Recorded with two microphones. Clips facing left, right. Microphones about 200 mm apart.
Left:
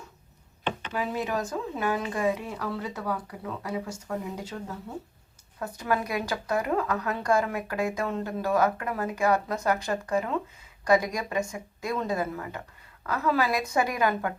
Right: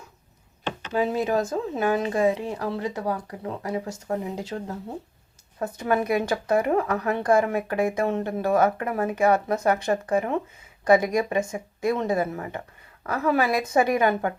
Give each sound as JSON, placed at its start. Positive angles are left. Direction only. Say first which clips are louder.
{"t": 0.9, "sound": "speech", "louder": "right 7 dB", "side_deg": -25}